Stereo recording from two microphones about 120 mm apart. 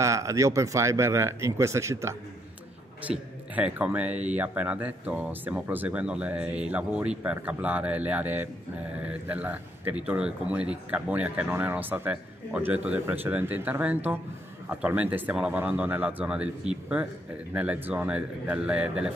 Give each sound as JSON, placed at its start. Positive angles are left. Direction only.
{"t": 0.0, "sound": "speech", "side_deg": -25}
{"t": 3.1, "sound": "speech", "side_deg": -10}